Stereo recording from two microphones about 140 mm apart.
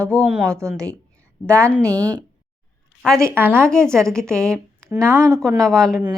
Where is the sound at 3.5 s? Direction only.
5° left (ahead or behind).